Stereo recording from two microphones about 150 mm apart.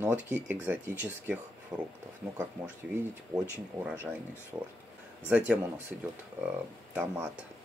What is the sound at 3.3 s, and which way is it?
Speech, 10° right (ahead or behind).